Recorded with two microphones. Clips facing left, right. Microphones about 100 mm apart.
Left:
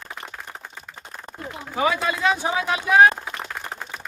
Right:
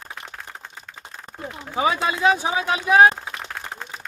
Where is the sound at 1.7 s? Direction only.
20° right (ahead or behind).